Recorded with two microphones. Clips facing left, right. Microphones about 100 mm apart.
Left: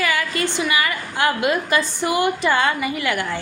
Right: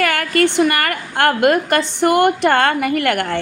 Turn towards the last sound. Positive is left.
turn(degrees=-60)  # may be behind; listen again after turning